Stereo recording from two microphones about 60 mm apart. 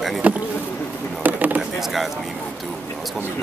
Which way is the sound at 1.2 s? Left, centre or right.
Right.